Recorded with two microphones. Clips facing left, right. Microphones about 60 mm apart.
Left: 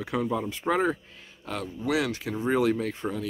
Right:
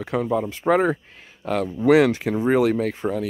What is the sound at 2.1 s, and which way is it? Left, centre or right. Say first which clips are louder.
Speech: right 7 dB; right.